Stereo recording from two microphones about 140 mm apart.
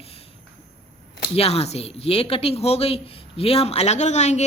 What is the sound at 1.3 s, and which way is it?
Speech, 45° left (ahead or behind).